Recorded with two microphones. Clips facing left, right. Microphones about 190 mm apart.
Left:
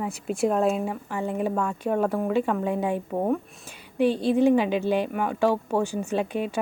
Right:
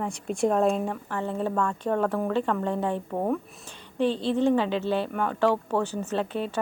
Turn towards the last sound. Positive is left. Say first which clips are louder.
# left 2 dB
turn(degrees=15)  # may be behind; listen again after turning